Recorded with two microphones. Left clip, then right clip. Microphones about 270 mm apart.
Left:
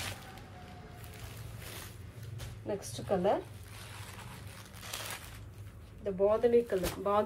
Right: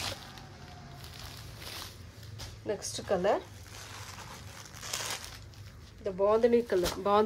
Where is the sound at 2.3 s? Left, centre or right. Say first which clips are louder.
Right 3 dB; right.